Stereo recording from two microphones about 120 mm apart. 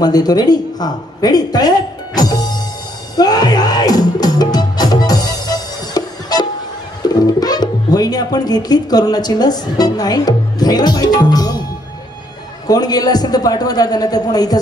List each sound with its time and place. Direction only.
0.0 s speech: 35° left (ahead or behind)
3.2 s music: 35° left (ahead or behind)
7.0 s speech: 35° left (ahead or behind)
12.6 s speech: 35° left (ahead or behind)